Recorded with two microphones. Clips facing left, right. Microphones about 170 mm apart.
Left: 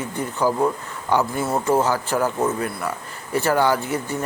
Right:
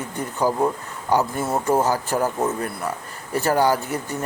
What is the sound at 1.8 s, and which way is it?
Speech, 40° right (ahead or behind).